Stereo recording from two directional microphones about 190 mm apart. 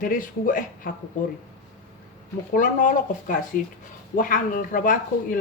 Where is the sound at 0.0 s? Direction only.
45° left (ahead or behind).